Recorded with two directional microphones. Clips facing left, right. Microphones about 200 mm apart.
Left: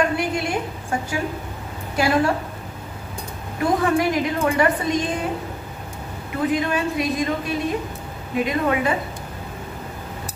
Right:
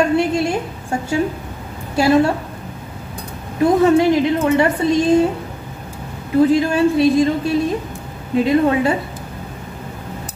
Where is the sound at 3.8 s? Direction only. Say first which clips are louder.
Right 7 dB; 25° right (ahead or behind).